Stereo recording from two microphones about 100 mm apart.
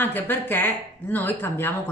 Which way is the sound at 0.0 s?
20° left (ahead or behind).